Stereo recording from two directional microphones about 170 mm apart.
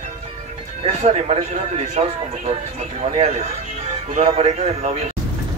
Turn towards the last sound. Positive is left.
turn(degrees=-40)  # may be behind; listen again after turning